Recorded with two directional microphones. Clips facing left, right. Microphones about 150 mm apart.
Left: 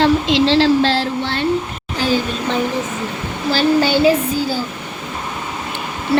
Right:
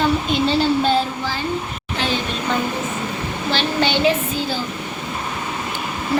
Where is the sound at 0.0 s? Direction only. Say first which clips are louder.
Left 5 dB; 90° left; by 1.5 s 75° left (ahead or behind).